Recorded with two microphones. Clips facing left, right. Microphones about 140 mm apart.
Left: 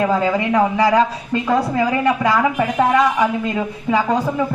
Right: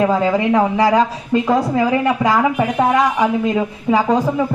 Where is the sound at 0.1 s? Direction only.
20° right (ahead or behind).